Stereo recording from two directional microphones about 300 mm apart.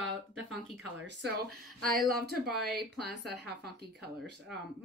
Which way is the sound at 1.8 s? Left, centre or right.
Right.